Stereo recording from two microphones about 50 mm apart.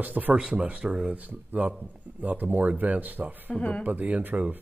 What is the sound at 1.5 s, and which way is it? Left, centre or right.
Speech, right.